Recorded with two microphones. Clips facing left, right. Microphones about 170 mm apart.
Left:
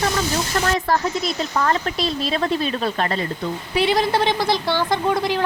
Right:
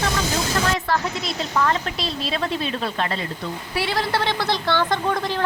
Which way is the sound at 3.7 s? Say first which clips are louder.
Left 5 dB; 20° left (ahead or behind).